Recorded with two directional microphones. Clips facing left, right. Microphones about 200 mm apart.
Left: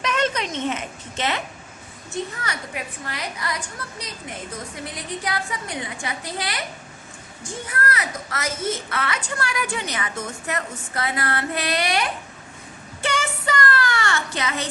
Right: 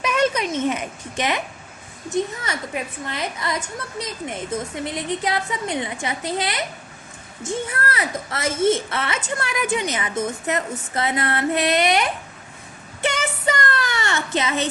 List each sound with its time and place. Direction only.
0.0 s speech: 10° right (ahead or behind)
13.0 s child singing: 20° right (ahead or behind)